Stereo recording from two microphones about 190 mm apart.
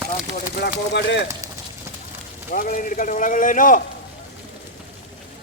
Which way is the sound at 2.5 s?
45° left (ahead or behind).